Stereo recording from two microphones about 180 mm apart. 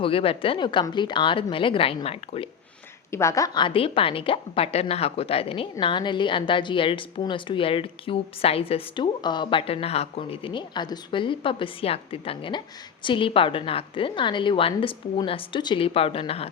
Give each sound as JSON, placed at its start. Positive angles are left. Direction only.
{"t": 0.0, "sound": "a woman's voice", "side_deg": 30}
{"t": 3.1, "sound": "a woman's voice", "side_deg": 15}